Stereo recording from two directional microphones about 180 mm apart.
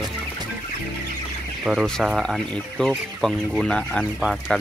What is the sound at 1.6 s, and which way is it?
Speech, centre (ahead or behind).